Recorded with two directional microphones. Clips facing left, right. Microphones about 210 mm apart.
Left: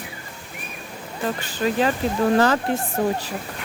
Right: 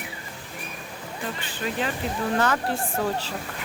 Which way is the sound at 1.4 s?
40° left (ahead or behind).